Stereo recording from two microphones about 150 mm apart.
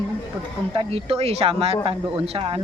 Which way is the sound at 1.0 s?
40° right (ahead or behind).